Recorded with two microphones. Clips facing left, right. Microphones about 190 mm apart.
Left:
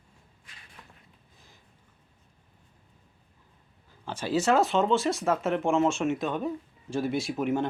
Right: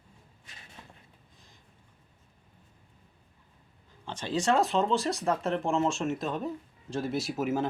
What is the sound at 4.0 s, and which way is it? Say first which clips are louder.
Speech: left 3 dB; 5° left (ahead or behind).